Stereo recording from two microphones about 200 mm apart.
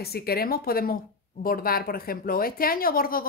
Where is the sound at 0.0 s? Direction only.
50° left (ahead or behind).